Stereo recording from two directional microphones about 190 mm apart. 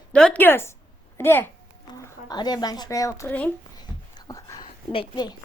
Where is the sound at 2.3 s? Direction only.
20° left (ahead or behind).